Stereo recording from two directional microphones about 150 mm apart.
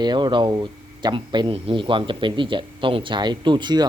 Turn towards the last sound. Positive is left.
turn(degrees=-30)  # may be behind; listen again after turning